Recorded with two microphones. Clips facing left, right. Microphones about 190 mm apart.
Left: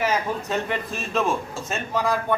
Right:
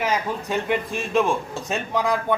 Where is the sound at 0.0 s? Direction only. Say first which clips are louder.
Even; 15° right (ahead or behind).